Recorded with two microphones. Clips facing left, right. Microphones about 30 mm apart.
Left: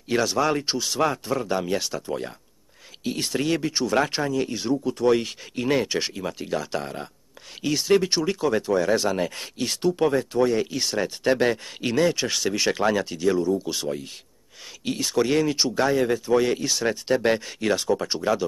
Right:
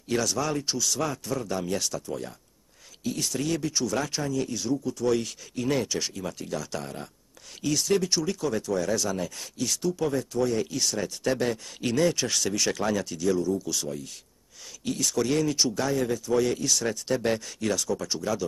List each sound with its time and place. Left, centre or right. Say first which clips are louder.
0.1 s speech: left 5 dB; left
11.8 s speech: left 2 dB; left